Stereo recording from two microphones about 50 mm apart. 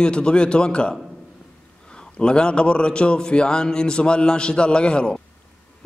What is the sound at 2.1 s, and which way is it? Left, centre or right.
A man's voice, centre.